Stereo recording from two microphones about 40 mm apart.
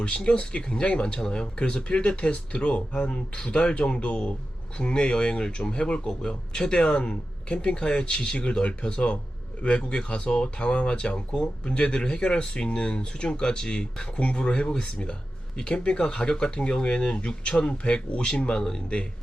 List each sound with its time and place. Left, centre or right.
0.0 s speech: left